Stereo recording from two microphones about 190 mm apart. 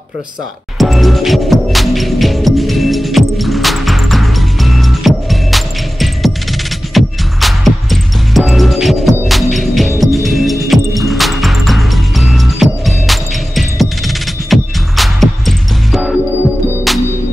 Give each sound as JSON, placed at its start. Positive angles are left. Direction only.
{"t": 0.7, "sound": "music", "side_deg": 0}